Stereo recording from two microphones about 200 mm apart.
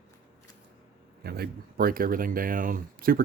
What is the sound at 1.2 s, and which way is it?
Speech, 50° right (ahead or behind).